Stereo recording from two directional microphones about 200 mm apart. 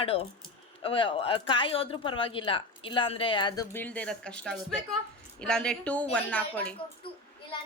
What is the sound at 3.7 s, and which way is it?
Speech, 10° left (ahead or behind).